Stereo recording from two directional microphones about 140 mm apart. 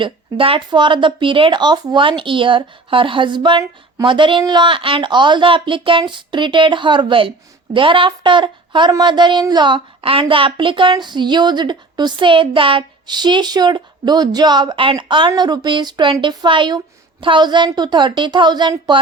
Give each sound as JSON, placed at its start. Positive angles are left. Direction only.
{"t": 0.0, "sound": "speech", "side_deg": -40}